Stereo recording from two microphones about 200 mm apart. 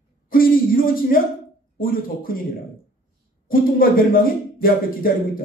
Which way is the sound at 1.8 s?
45° left (ahead or behind).